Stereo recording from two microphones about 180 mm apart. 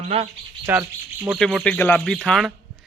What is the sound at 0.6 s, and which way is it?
Speech, 10° right (ahead or behind).